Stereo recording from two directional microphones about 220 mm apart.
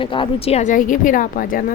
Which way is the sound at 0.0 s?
25° left (ahead or behind).